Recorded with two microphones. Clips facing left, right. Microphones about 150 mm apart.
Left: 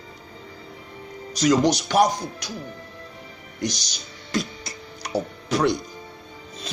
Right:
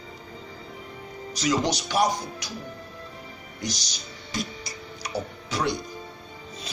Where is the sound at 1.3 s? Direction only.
45° left (ahead or behind).